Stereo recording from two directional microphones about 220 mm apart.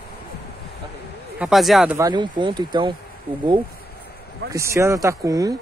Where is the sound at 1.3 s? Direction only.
Centre (ahead or behind).